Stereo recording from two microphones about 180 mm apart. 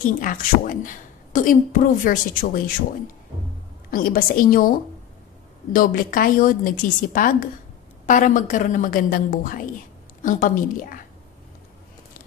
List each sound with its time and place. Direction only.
0.2 s a woman's voice: 50° left (ahead or behind)
3.9 s a woman's voice: 50° left (ahead or behind)